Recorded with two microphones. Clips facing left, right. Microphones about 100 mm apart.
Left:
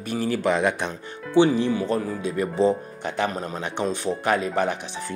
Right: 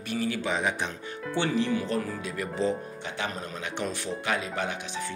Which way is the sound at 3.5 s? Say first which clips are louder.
Left 6 dB; 30° left (ahead or behind).